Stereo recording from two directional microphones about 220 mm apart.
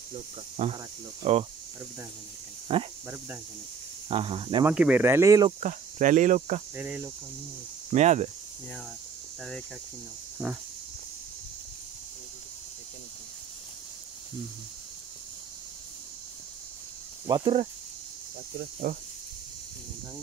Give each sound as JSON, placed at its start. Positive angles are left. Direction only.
{"t": 0.6, "sound": "speech", "side_deg": -25}
{"t": 2.7, "sound": "speech", "side_deg": -25}
{"t": 4.1, "sound": "speech", "side_deg": -25}
{"t": 4.6, "sound": "speech", "side_deg": -5}
{"t": 5.6, "sound": "speech", "side_deg": -35}
{"t": 6.7, "sound": "speech", "side_deg": -10}
{"t": 7.9, "sound": "speech", "side_deg": -30}
{"t": 10.4, "sound": "speech", "side_deg": -5}
{"t": 17.3, "sound": "speech", "side_deg": -25}
{"t": 18.9, "sound": "speech", "side_deg": -35}